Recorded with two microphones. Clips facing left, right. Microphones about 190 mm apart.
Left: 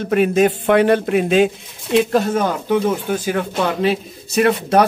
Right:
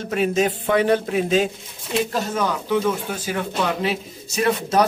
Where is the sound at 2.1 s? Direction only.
55° left (ahead or behind).